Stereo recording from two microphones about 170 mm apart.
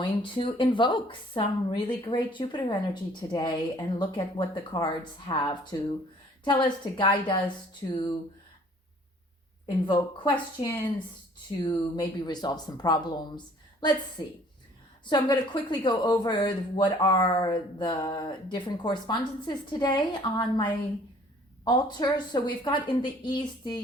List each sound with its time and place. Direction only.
0.0 s speech: 30° left (ahead or behind)
6.4 s speech: 25° left (ahead or behind)
9.6 s speech: 30° left (ahead or behind)